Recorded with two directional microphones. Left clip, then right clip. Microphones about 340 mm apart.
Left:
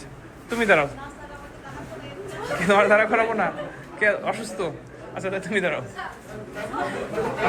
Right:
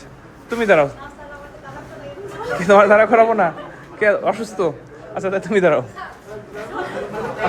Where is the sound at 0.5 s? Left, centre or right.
Centre.